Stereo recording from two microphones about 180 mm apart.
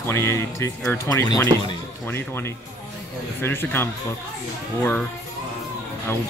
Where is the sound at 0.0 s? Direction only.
15° left (ahead or behind).